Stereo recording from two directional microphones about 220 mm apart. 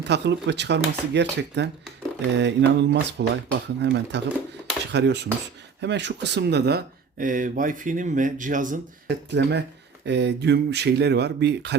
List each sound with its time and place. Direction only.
0.0 s speech: 50° right (ahead or behind); by 8.8 s 35° right (ahead or behind)
9.0 s speech: 50° right (ahead or behind)